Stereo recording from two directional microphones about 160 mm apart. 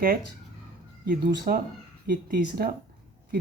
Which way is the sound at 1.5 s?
60° right (ahead or behind).